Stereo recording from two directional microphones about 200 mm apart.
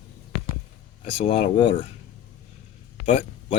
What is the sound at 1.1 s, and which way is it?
Speech, 30° left (ahead or behind).